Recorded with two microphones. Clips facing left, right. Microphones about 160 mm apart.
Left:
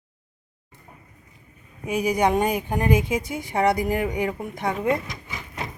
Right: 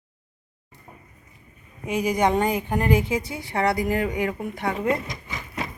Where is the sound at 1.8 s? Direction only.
10° left (ahead or behind).